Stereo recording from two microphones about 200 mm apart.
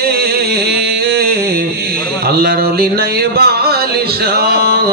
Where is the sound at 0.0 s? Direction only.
50° right (ahead or behind).